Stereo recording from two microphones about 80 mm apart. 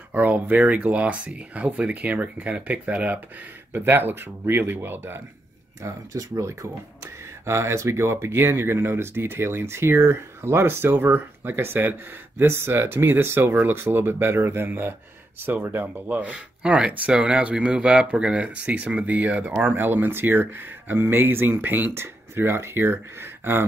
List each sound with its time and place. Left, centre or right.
0.1 s speech: right
5.8 s speech: right